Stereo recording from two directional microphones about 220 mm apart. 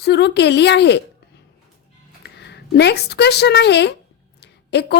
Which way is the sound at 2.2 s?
50° left (ahead or behind).